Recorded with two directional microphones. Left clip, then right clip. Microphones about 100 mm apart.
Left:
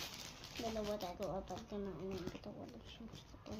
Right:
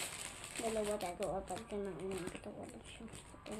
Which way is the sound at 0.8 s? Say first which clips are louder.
Right 3 dB; 40° left (ahead or behind).